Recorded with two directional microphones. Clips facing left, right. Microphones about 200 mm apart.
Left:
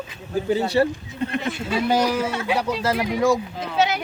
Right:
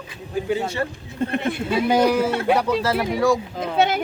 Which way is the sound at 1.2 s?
55° right (ahead or behind).